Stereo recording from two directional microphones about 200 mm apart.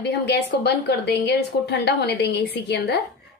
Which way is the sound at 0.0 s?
55° left (ahead or behind).